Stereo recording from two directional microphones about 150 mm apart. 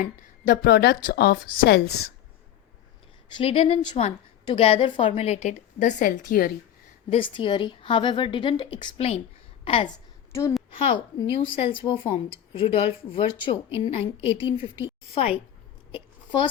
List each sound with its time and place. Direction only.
0.0 s a woman's voice: 80° left
3.3 s a woman's voice: 40° left (ahead or behind); by 6.2 s 60° left (ahead or behind)
6.3 s speech: 80° left
7.1 s a woman's voice: 35° left (ahead or behind)
11.2 s a woman's voice: 35° left (ahead or behind)
15.9 s a sound: 35° left (ahead or behind)